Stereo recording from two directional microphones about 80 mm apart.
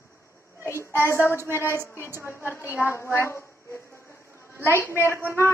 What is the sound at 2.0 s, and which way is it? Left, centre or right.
Speech, right.